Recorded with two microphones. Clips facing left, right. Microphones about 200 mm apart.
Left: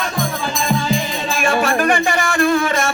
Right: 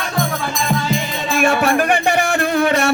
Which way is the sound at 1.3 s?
60° right (ahead or behind).